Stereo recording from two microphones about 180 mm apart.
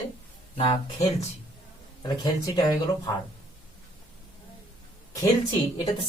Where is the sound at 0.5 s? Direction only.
30° left (ahead or behind).